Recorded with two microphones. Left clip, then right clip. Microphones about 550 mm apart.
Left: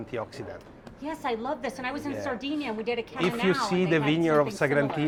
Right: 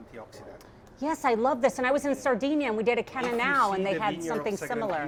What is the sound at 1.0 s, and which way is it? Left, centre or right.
A woman's voice, right.